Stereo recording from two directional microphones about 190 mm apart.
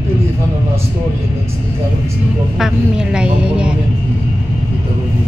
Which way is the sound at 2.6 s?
5° right (ahead or behind).